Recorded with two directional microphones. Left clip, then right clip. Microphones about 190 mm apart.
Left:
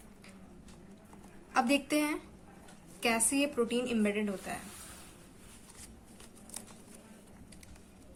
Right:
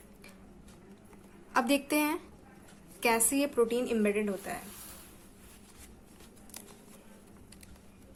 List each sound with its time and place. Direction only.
1.5 s a woman's voice: 25° right (ahead or behind)